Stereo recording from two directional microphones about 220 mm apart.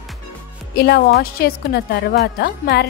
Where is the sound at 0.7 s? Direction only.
45° left (ahead or behind).